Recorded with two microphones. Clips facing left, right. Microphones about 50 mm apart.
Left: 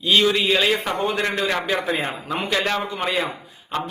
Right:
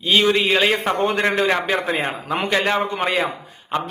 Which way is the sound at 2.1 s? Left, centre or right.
Centre.